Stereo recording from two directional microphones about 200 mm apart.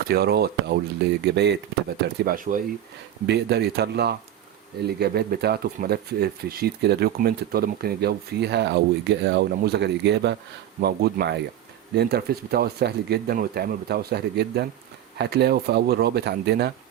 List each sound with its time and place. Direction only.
0.0 s speech: 50° right (ahead or behind)
2.1 s speech: 45° right (ahead or behind)
3.2 s speech: 55° right (ahead or behind)